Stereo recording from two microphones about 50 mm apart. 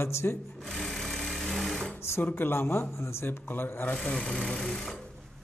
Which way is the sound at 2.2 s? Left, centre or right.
Left.